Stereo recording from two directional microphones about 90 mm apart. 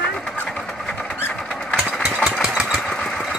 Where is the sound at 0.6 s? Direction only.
5° left (ahead or behind).